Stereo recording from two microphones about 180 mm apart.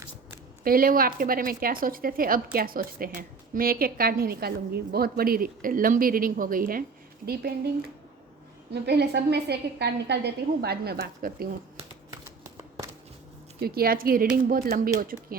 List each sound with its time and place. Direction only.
0.6 s a woman's voice: 55° right (ahead or behind)
8.7 s a woman's voice: 65° right (ahead or behind)
13.6 s a woman's voice: 55° right (ahead or behind)